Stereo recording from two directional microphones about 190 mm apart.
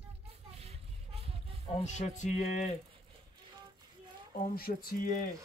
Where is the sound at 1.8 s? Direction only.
40° left (ahead or behind).